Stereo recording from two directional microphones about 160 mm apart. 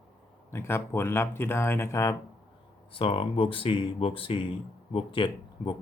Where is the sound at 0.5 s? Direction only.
15° left (ahead or behind).